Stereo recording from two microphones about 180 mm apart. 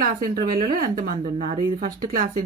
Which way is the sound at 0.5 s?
50° right (ahead or behind).